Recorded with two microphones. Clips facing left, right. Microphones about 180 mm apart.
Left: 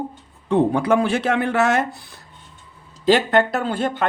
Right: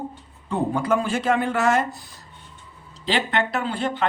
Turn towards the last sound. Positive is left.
turn(degrees=50)  # may be behind; listen again after turning